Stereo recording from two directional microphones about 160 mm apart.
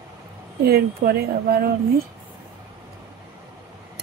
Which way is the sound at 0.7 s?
75° right (ahead or behind).